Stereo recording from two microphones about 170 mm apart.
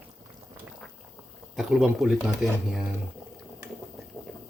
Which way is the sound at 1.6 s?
5° right (ahead or behind).